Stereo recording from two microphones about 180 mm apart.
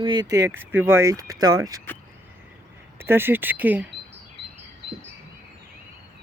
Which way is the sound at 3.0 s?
10° right (ahead or behind).